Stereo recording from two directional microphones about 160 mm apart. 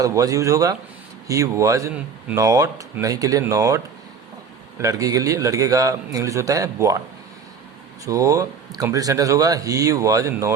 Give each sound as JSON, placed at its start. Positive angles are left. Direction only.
{"t": 0.0, "sound": "speech", "side_deg": -20}
{"t": 4.8, "sound": "speech", "side_deg": -20}
{"t": 8.0, "sound": "speech", "side_deg": -20}